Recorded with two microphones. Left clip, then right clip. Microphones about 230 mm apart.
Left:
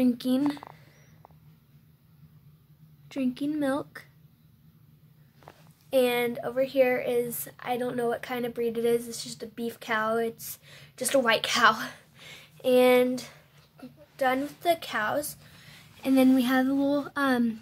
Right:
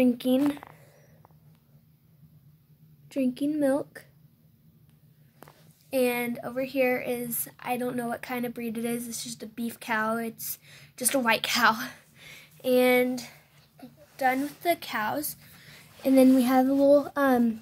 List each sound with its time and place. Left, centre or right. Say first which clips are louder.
0.0 s speech: right 2 dB; centre
3.1 s speech: right 2 dB; centre
5.9 s a woman's voice: left 2 dB; centre